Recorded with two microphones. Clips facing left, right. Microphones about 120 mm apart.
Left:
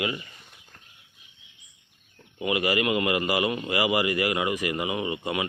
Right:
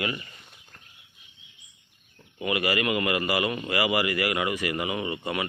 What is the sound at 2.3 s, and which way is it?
Speech, 20° left (ahead or behind).